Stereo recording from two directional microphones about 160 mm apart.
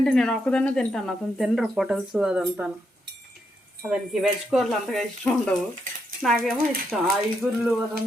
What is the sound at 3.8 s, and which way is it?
Speech, 5° right (ahead or behind).